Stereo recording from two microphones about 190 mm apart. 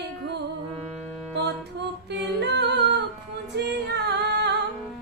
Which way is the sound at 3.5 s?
60° right (ahead or behind).